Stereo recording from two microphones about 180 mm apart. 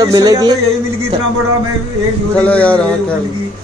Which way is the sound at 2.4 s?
10° left (ahead or behind).